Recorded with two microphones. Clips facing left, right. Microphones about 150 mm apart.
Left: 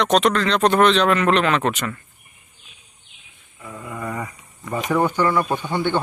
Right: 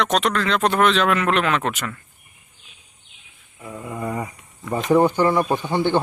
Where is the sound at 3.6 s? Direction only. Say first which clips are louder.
Right 2 dB; 20° right (ahead or behind).